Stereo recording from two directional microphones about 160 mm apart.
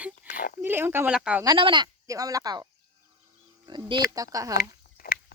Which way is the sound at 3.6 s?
30° right (ahead or behind).